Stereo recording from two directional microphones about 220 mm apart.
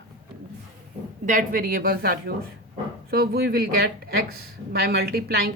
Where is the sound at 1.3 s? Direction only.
40° right (ahead or behind).